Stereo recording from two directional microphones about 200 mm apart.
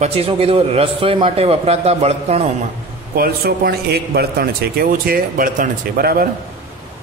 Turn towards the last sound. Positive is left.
turn(degrees=-50)  # may be behind; listen again after turning